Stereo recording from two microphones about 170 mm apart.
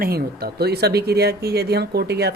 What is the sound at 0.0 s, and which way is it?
Speech, 65° right (ahead or behind).